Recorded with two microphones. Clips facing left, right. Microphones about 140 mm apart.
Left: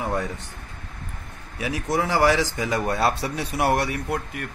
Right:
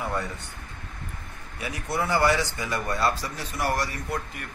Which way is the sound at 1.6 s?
90° left.